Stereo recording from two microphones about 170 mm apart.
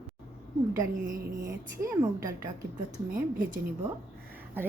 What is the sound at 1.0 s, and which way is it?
Music, 55° right (ahead or behind).